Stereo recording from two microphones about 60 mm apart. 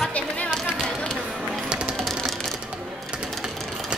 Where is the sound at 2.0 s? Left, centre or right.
Centre.